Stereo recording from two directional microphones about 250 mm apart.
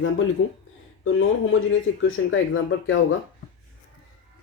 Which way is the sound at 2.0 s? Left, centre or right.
Left.